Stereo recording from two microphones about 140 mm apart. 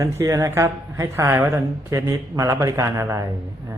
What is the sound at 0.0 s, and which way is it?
Speech, 20° right (ahead or behind).